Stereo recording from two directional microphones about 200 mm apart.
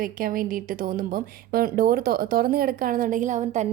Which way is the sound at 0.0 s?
45° right (ahead or behind).